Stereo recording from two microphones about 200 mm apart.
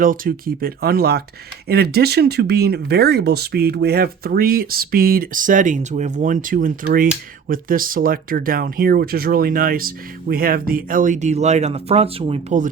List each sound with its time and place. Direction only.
0.0 s speech: 45° right (ahead or behind)